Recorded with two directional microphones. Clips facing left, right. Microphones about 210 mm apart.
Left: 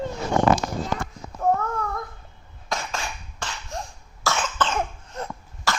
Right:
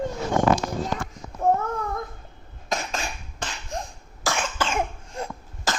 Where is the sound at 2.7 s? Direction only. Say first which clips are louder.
Right 1 dB; 20° right (ahead or behind).